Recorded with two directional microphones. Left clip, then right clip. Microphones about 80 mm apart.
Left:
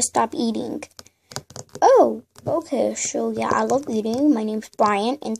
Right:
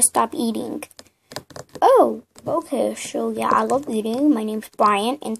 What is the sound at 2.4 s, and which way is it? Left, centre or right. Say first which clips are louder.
Speech: even; centre.